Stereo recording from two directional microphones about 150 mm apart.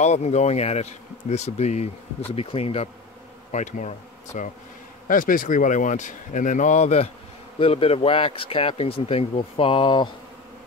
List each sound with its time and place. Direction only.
0.0 s speech: 50° left (ahead or behind)
3.5 s speech: 55° left (ahead or behind)
5.0 s speech: 65° left (ahead or behind); by 10.0 s 35° left (ahead or behind)